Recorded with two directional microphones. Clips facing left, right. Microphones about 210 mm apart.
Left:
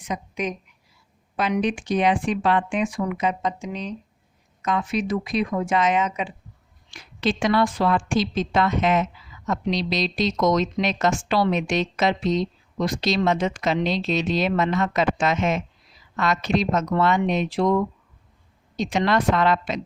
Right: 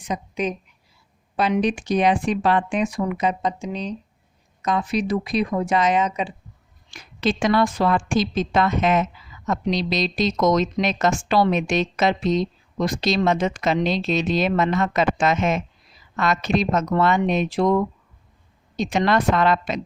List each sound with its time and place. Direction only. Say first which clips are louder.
0.0 s a woman's voice: right 2 dB; 30° right (ahead or behind); by 19.8 s 50° right (ahead or behind)